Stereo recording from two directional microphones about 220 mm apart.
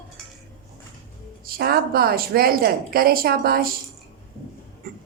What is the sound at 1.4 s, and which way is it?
Speech, 40° right (ahead or behind).